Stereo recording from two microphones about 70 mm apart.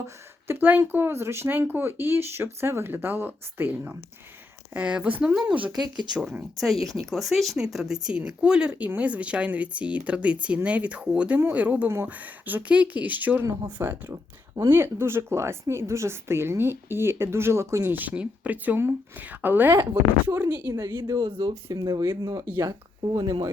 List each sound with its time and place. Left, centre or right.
0.0 s speech: right
4.7 s speech: centre
6.6 s speech: centre
8.7 s speech: right
9.0 s speech: centre; by 17.9 s right
17.9 s speech: right
21.1 s speech: right
22.2 s speech: right
23.0 s speech: right